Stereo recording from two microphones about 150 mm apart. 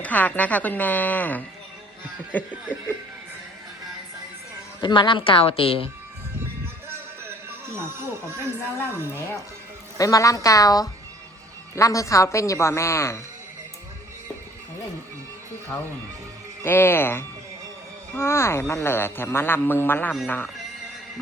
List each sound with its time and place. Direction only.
0.0 s speech: 10° left (ahead or behind)
4.8 s a woman's voice: 30° left (ahead or behind)
7.8 s speech: 15° right (ahead or behind)
10.0 s a man's voice: 20° left (ahead or behind)
16.6 s speech: 15° left (ahead or behind)